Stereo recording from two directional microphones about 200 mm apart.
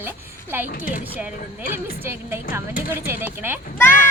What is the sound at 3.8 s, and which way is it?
Speech, 10° left (ahead or behind).